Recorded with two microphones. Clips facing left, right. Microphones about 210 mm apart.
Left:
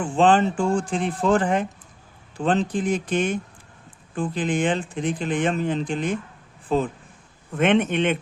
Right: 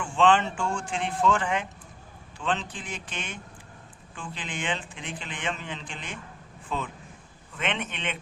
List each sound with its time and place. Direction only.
0.0 s speech: 35° left (ahead or behind)
7.5 s a man's voice: 50° left (ahead or behind)